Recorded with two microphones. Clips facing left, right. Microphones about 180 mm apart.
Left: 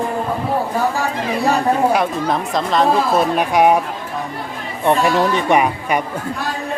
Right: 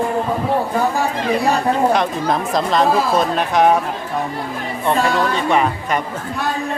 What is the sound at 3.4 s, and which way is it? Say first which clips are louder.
Speech: left 1 dB; 10° left (ahead or behind).